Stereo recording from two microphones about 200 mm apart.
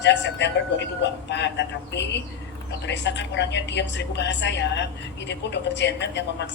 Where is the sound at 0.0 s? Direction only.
60° left (ahead or behind).